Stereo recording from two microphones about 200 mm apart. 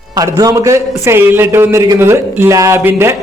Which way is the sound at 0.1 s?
20° right (ahead or behind).